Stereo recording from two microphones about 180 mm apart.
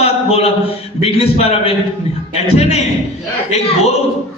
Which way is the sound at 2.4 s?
35° left (ahead or behind).